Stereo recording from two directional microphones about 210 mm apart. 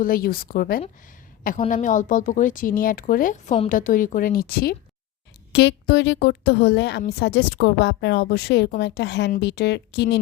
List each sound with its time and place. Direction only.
0.0 s a woman's voice: 45° left (ahead or behind)